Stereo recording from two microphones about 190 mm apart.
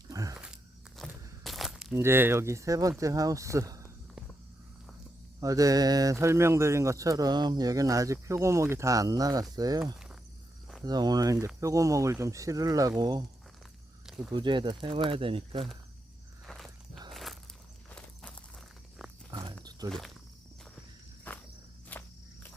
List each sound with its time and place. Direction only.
0.1 s a sound: 20° right (ahead or behind)
0.3 s walk: 5° right (ahead or behind)
3.0 s speech: 15° right (ahead or behind)
5.4 s speech: 15° right (ahead or behind)
9.8 s cricket: 5° right (ahead or behind)
10.8 s speech: 20° right (ahead or behind)
14.3 s speech: 25° right (ahead or behind)
16.5 s walk: centre (ahead or behind)
19.3 s walk: 25° right (ahead or behind)
21.9 s cricket: 10° left (ahead or behind)